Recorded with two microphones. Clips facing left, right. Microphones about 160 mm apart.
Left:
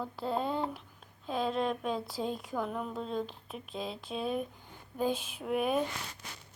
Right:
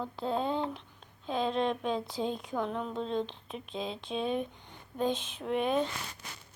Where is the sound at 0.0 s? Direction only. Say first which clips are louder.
Right 1 dB; 5° left (ahead or behind).